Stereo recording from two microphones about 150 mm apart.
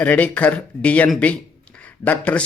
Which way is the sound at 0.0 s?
10° left (ahead or behind).